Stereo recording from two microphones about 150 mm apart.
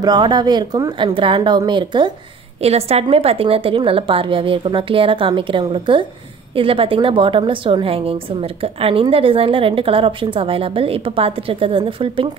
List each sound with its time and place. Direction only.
0.0 s a woman's voice: 25° right (ahead or behind)
2.6 s a woman's voice: 45° right (ahead or behind)